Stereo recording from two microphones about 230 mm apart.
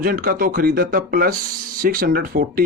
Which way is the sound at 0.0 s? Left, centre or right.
Right.